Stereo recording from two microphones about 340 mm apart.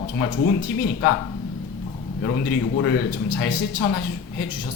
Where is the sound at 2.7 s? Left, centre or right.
Left.